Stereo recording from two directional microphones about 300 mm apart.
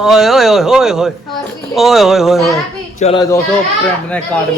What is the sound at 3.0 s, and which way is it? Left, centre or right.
Speech, centre.